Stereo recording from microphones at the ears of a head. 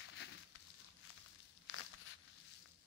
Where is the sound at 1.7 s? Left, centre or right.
Left.